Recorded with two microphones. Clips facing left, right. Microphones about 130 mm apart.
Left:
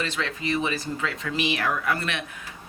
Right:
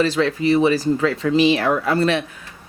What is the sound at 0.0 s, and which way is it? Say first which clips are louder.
Speech: right 11 dB; 35° right (ahead or behind).